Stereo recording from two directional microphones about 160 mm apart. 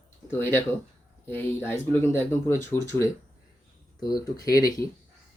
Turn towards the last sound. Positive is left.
turn(degrees=25)  # may be behind; listen again after turning